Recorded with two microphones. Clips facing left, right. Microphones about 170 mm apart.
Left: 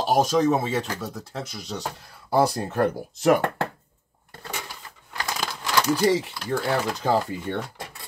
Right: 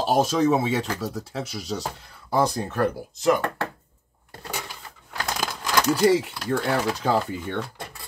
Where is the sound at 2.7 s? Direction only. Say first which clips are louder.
Left 1 dB; 25° left (ahead or behind).